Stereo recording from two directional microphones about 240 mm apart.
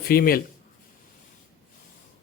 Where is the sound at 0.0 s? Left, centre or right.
Left.